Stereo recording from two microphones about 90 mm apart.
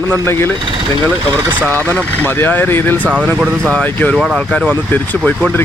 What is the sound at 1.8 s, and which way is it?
Speech, 20° left (ahead or behind).